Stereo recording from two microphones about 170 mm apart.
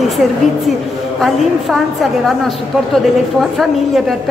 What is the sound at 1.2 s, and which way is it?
A woman's voice, centre (ahead or behind).